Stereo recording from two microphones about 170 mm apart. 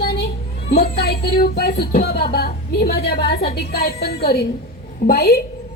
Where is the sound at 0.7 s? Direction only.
65° left (ahead or behind).